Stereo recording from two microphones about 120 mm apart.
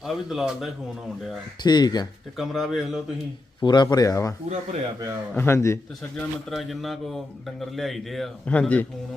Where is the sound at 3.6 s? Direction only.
40° left (ahead or behind).